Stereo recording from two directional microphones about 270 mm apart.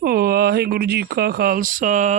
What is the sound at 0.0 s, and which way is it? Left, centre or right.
Speech, right.